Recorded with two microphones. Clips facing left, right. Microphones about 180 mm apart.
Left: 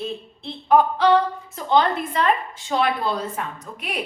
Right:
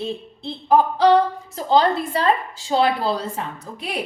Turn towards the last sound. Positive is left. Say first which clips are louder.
# right 2 dB
turn(degrees=-30)  # may be behind; listen again after turning